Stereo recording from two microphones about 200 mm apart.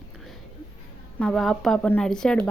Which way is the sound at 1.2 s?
5° left (ahead or behind).